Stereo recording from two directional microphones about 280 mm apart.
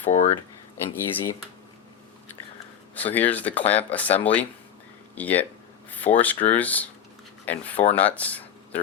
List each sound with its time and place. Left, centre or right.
0.1 s speech: left
0.9 s speech: centre
2.9 s speech: centre